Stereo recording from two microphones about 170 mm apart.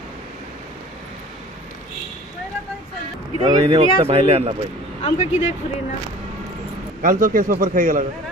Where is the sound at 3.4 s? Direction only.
25° right (ahead or behind).